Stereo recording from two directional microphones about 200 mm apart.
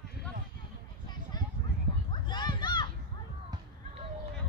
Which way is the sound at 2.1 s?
20° left (ahead or behind).